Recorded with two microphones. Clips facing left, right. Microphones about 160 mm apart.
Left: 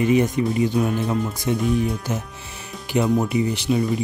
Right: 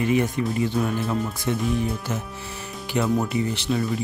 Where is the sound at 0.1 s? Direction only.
20° left (ahead or behind).